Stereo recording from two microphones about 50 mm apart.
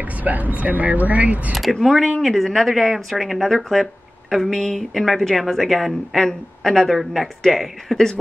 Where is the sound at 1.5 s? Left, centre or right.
Centre.